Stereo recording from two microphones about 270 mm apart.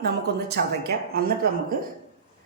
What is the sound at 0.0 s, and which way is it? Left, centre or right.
A woman's voice, right.